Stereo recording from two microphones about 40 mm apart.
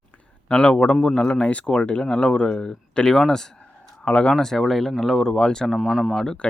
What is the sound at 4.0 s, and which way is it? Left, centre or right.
Speech, left.